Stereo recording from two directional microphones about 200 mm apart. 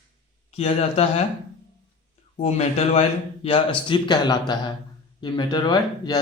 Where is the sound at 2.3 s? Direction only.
35° left (ahead or behind).